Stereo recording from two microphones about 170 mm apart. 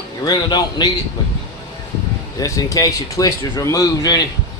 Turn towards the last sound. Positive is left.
turn(degrees=20)  # may be behind; listen again after turning